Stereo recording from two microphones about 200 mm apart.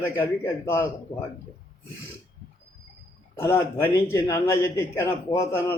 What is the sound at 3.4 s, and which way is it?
Speech, 10° left (ahead or behind).